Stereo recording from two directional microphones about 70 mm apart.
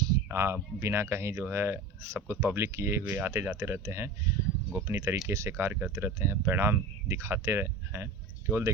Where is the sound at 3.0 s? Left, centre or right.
Right.